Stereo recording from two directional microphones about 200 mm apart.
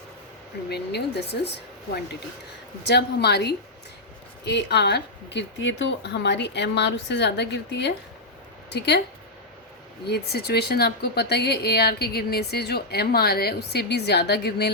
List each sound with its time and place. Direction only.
0.7 s speech: 55° left (ahead or behind)
10.1 s a woman's voice: 55° left (ahead or behind)